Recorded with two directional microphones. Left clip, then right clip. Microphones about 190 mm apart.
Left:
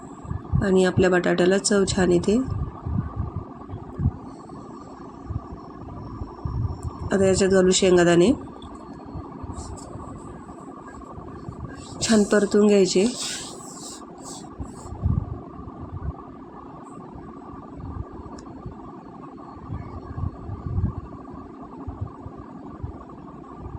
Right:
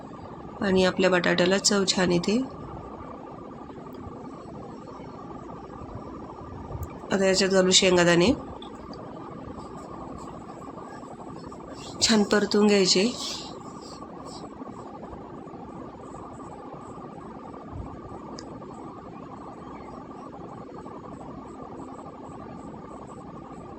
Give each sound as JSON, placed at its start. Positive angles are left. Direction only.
{"t": 0.6, "sound": "speech", "side_deg": 15}
{"t": 7.1, "sound": "speech", "side_deg": 15}
{"t": 11.9, "sound": "speech", "side_deg": 15}